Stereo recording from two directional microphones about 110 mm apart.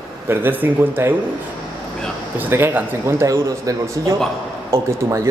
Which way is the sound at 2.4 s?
20° right (ahead or behind).